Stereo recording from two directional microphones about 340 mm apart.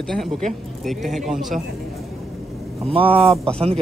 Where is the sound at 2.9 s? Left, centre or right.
Centre.